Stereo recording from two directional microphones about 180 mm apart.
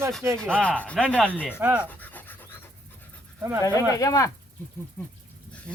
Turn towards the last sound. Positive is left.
turn(degrees=10)  # may be behind; listen again after turning